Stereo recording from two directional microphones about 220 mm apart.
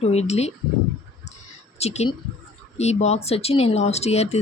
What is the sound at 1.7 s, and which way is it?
Speech, 30° left (ahead or behind).